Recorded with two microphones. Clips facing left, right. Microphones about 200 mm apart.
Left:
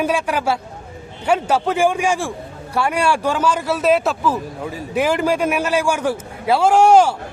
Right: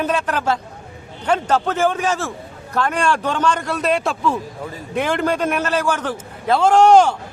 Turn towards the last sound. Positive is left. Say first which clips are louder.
# even
turn(degrees=10)  # may be behind; listen again after turning